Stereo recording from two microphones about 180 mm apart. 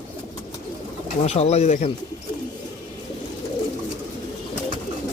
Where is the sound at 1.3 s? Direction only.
35° left (ahead or behind).